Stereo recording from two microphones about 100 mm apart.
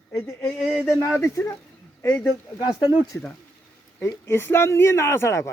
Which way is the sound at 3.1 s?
15° left (ahead or behind).